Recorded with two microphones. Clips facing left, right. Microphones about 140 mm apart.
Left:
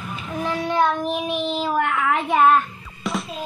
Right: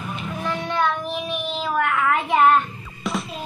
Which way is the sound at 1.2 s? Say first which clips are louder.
Left 3 dB; 15° left (ahead or behind).